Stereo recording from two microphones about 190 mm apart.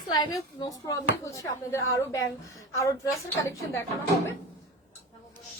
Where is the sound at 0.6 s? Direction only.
20° left (ahead or behind).